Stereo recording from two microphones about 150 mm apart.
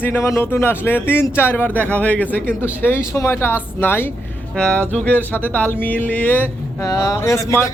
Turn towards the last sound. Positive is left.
turn(degrees=20)  # may be behind; listen again after turning